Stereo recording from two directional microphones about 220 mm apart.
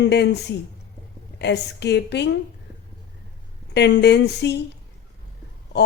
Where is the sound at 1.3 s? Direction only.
50° left (ahead or behind).